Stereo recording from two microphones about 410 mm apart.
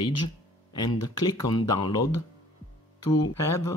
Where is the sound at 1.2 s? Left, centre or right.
Centre.